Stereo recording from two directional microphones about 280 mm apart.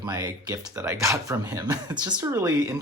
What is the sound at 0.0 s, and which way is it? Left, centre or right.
Speech, centre.